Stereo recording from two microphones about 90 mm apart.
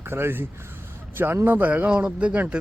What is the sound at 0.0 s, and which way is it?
Speech, 25° right (ahead or behind).